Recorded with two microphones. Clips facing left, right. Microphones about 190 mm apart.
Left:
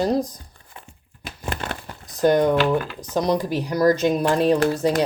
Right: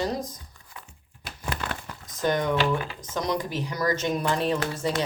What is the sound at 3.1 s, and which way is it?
A woman's voice, 35° left (ahead or behind).